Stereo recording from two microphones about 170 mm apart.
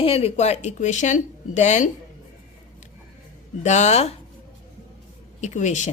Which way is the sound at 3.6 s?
45° left (ahead or behind).